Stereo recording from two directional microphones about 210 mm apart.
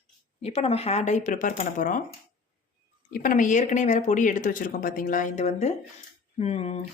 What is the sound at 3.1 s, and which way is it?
Speech, 40° left (ahead or behind).